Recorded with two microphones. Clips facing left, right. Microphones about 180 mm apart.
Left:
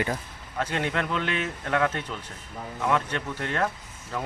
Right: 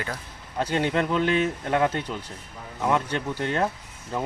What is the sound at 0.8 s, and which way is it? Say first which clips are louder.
Speech: right 6 dB; 20° right (ahead or behind).